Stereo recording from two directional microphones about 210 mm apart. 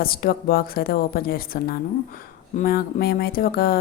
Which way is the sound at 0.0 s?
45° left (ahead or behind).